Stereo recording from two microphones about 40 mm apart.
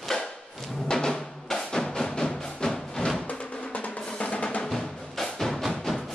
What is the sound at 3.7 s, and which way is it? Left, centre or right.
Drum, left.